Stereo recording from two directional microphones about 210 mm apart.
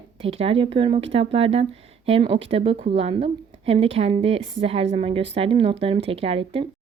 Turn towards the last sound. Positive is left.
turn(degrees=-25)  # may be behind; listen again after turning